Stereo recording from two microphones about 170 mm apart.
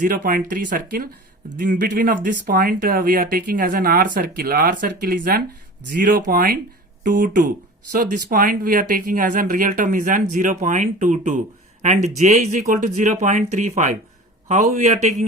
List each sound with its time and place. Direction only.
0.0 s speech: 55° right (ahead or behind)